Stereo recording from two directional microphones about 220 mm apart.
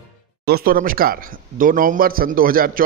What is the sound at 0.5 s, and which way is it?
A man's voice, 45° right (ahead or behind).